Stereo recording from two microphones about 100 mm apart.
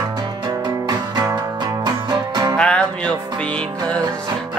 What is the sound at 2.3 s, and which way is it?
Music, 45° right (ahead or behind).